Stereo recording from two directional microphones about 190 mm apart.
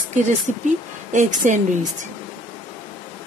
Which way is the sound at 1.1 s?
40° right (ahead or behind).